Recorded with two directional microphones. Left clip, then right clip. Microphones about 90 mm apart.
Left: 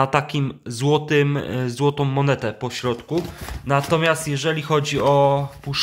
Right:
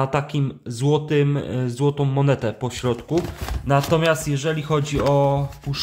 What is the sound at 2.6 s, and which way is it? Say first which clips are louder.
Speech: even; 45° right (ahead or behind).